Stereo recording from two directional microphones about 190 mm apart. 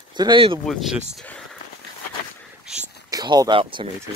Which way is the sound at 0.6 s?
Centre (ahead or behind).